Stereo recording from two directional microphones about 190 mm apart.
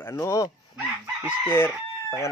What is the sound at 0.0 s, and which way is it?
Speech, 15° left (ahead or behind).